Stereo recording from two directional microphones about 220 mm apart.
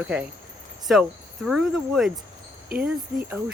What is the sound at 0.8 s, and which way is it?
Cricket, centre (ahead or behind).